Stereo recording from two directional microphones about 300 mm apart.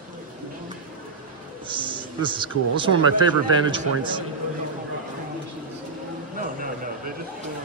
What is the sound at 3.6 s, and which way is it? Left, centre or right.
Speech, centre.